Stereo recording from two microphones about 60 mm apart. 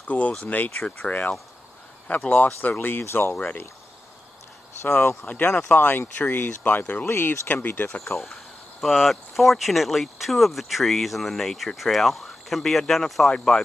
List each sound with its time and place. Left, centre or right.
0.0 s speech: left
5.2 s speech: left
7.1 s speech: left
7.4 s speech: left
8.1 s speech: centre